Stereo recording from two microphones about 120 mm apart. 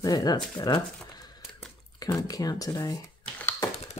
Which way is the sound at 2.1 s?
30° left (ahead or behind).